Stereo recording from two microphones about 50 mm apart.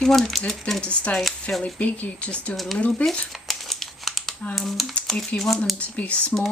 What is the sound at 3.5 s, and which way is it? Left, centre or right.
Crumpling, centre.